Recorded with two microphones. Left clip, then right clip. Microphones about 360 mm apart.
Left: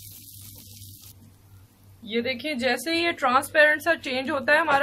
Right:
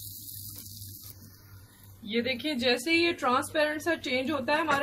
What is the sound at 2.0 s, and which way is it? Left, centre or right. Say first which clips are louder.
A woman's voice: left 3 dB; centre.